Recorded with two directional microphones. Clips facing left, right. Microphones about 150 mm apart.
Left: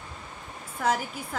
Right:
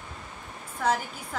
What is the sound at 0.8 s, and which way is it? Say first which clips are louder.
Speech: even; 5° left (ahead or behind).